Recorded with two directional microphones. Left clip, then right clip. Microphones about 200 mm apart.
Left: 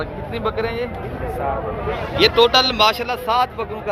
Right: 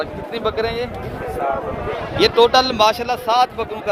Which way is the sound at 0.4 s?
60° right (ahead or behind).